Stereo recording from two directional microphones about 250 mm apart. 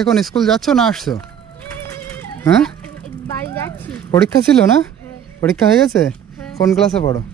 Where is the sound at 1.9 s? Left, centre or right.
Centre.